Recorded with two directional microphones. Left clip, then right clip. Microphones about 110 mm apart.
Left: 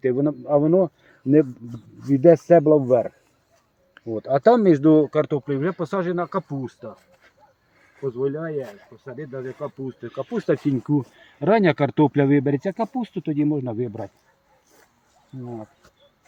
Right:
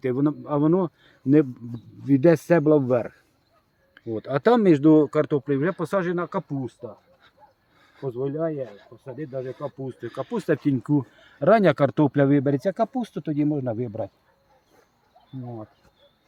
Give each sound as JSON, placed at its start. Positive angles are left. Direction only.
{"t": 0.0, "sound": "speech", "side_deg": -50}
{"t": 2.0, "sound": "speech", "side_deg": -40}
{"t": 4.8, "sound": "speech", "side_deg": 10}
{"t": 6.7, "sound": "speech", "side_deg": 0}
{"t": 8.1, "sound": "speech", "side_deg": -5}
{"t": 10.1, "sound": "speech", "side_deg": -50}
{"t": 10.4, "sound": "speech", "side_deg": -25}